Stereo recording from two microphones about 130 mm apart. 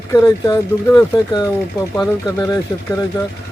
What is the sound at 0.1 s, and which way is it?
Speech, 30° left (ahead or behind).